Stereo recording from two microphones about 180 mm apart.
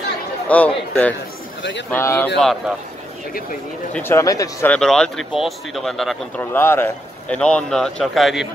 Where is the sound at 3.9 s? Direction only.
15° left (ahead or behind).